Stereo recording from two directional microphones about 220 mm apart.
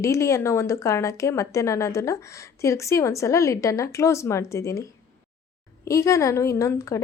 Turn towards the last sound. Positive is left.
turn(degrees=15)  # may be behind; listen again after turning